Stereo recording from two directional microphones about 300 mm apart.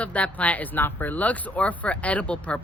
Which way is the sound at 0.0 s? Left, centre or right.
Centre.